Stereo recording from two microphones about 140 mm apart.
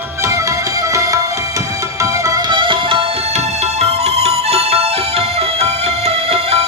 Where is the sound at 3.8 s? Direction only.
50° right (ahead or behind).